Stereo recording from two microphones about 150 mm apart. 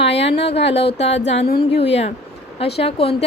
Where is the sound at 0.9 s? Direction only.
45° left (ahead or behind).